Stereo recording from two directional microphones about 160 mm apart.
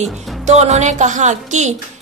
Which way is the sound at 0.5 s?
45° right (ahead or behind).